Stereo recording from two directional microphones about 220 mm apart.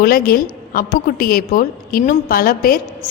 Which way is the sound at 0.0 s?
40° left (ahead or behind).